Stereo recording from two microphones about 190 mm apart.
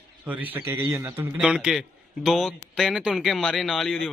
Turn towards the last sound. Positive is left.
turn(degrees=0)  # may be behind; listen again after turning